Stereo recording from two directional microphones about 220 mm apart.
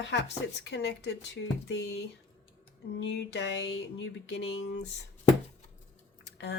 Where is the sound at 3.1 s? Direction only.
50° left (ahead or behind).